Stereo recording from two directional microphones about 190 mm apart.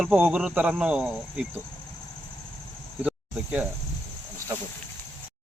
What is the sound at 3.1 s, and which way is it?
Cricket, 5° right (ahead or behind).